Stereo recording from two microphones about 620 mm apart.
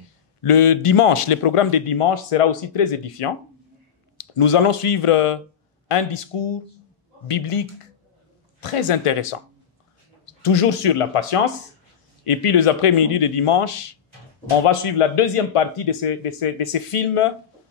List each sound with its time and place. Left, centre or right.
0.4 s speech: left